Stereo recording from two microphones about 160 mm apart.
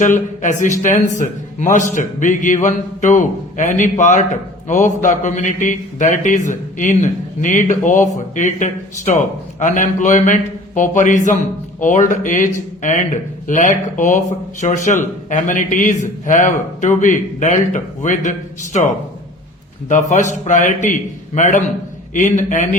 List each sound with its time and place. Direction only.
0.0 s a man's voice: 50° left (ahead or behind)
19.9 s a man's voice: 50° left (ahead or behind)